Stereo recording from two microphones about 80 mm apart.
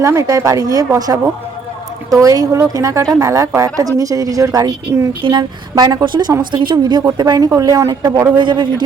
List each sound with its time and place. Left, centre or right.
0.0 s a woman's voice: right
5.2 s a woman's voice: right
6.4 s speech: right
7.2 s a woman's voice: right
8.4 s a man's voice: right